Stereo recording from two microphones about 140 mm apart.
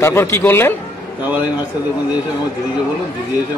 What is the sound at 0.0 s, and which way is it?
Speech, 20° left (ahead or behind).